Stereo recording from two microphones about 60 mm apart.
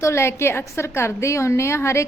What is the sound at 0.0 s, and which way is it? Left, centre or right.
A woman's voice, left.